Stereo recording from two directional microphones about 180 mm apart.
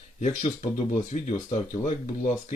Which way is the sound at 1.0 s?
40° left (ahead or behind).